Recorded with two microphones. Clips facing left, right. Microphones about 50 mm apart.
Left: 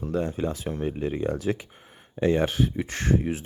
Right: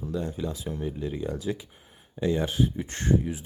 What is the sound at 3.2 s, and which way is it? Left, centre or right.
Speech, left.